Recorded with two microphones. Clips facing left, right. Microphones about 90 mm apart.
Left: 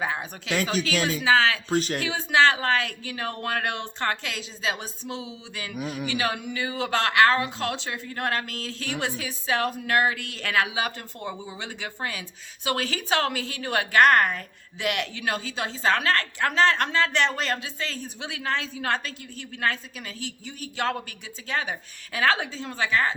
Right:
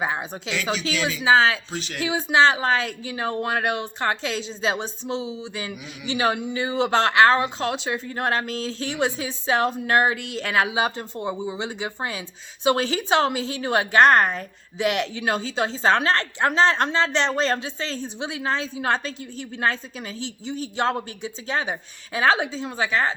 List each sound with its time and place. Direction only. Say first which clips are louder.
0.0 s a woman's voice: right 3 dB; 20° right (ahead or behind)
0.5 s speech: left 1 dB; 45° left (ahead or behind)
1.2 s a woman's voice: right 4 dB; 20° right (ahead or behind)
1.7 s speech: left 8 dB; 45° left (ahead or behind)
2.0 s a woman's voice: right 5 dB; 20° right (ahead or behind)
5.7 s speech: left 7 dB; 45° left (ahead or behind)
6.1 s a woman's voice: right 8 dB; 25° right (ahead or behind)